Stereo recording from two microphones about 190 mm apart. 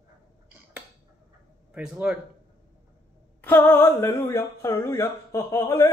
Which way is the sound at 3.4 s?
10° left (ahead or behind).